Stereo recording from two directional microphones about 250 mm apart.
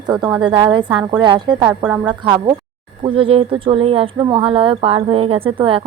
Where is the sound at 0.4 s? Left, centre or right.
Centre.